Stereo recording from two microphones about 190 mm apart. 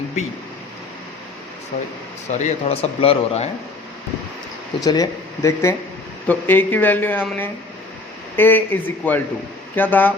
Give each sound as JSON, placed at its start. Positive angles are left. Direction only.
{"t": 2.4, "sound": "speech", "side_deg": 30}
{"t": 4.8, "sound": "speech", "side_deg": 20}